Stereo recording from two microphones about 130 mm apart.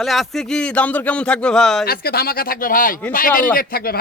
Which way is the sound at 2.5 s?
90° left.